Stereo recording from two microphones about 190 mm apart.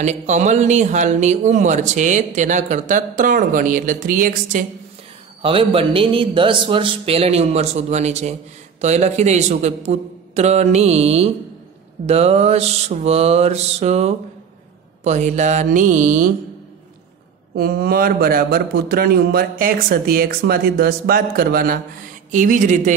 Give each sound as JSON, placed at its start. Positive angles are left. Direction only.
{"t": 0.0, "sound": "speech", "side_deg": -35}
{"t": 5.4, "sound": "a man's voice", "side_deg": -30}
{"t": 17.6, "sound": "a man's voice", "side_deg": -55}